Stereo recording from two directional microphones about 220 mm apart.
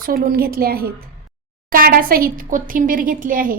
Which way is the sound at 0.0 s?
40° right (ahead or behind).